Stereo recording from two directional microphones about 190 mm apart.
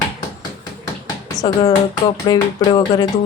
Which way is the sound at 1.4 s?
20° left (ahead or behind).